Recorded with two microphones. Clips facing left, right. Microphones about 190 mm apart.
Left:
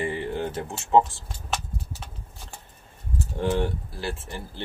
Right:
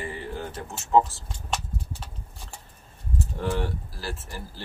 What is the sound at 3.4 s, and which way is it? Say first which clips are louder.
Speech: left 5 dB; 25° left (ahead or behind).